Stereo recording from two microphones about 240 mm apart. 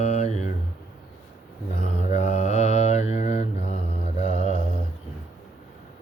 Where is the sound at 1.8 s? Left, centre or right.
Left.